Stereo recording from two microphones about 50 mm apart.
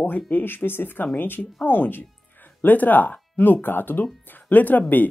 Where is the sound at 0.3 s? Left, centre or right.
Left.